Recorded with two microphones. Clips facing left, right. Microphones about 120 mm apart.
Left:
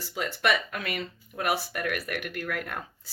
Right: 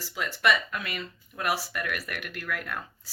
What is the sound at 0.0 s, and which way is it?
A woman's voice, 50° left (ahead or behind).